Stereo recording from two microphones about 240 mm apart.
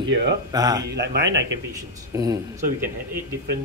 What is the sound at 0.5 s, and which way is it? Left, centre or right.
Speech, centre.